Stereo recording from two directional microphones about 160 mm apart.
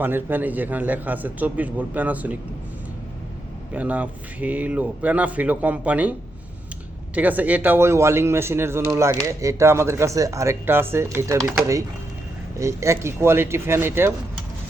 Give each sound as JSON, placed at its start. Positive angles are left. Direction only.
{"t": 0.0, "sound": "speech", "side_deg": -10}
{"t": 3.7, "sound": "speech", "side_deg": -10}
{"t": 12.5, "sound": "speech", "side_deg": -20}